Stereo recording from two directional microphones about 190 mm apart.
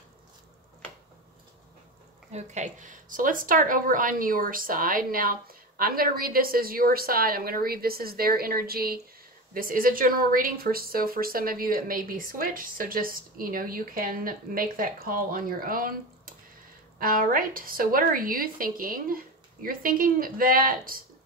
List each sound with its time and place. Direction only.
2.3 s speech: 40° right (ahead or behind)
17.0 s speech: 45° right (ahead or behind)